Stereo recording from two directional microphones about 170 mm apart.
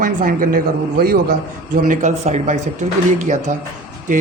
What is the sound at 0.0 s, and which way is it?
Speech, 55° right (ahead or behind).